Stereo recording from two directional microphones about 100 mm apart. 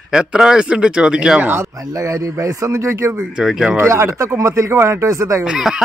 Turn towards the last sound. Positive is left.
turn(degrees=-5)  # may be behind; listen again after turning